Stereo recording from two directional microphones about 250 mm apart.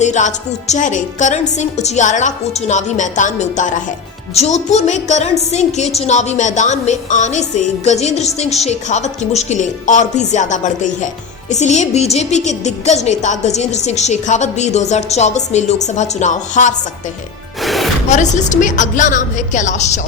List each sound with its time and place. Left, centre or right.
0.0 s speech: left
17.6 s music: centre
18.1 s speech: left